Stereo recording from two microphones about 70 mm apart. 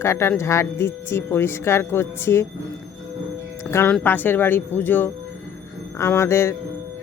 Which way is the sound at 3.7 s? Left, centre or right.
Centre.